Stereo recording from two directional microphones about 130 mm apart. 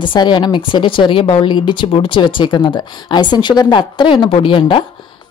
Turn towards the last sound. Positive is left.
turn(degrees=40)  # may be behind; listen again after turning